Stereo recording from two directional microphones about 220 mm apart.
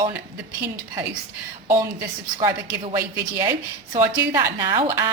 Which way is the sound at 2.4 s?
20° right (ahead or behind).